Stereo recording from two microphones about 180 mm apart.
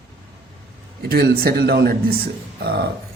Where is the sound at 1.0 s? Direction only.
60° right (ahead or behind).